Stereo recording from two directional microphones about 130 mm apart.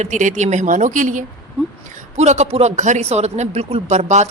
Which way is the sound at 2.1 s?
60° right (ahead or behind).